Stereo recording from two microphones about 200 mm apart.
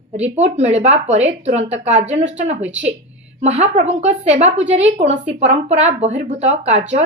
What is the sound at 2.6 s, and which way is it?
Speech, 5° right (ahead or behind).